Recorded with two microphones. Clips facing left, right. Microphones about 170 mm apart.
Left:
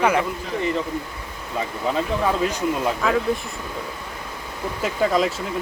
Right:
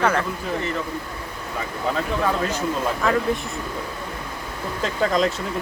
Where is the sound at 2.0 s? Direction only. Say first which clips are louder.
Left 2 dB; 15° left (ahead or behind).